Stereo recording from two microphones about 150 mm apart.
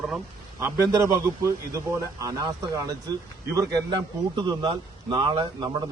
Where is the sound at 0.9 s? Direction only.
20° right (ahead or behind).